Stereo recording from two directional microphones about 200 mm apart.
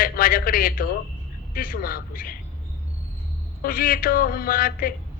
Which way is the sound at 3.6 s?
45° left (ahead or behind).